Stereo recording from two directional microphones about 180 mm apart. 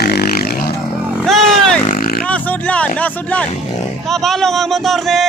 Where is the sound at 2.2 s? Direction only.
5° left (ahead or behind).